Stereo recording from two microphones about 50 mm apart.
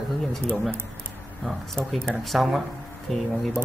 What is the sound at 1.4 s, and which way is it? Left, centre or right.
Speech, centre.